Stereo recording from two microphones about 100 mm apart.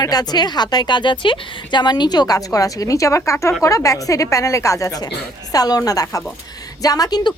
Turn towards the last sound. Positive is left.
turn(degrees=40)  # may be behind; listen again after turning